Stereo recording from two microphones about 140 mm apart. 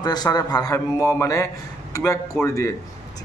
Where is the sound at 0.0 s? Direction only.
30° left (ahead or behind).